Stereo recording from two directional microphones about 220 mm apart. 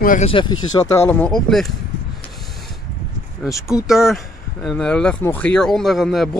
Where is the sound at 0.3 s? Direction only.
20° left (ahead or behind).